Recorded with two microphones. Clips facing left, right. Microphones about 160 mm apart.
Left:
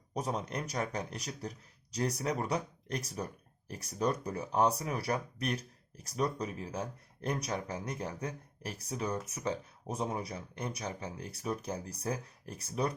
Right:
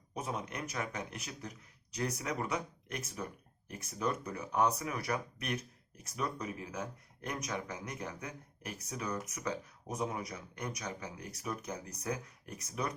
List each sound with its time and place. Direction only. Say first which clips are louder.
0.1 s speech: left 4 dB; 35° left (ahead or behind)